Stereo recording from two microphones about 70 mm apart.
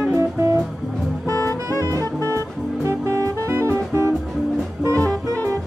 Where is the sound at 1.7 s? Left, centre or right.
Right.